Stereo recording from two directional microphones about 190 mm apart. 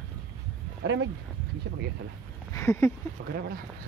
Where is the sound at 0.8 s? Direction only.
70° right (ahead or behind).